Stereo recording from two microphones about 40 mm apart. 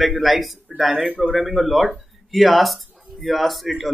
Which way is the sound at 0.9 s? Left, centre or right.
Right.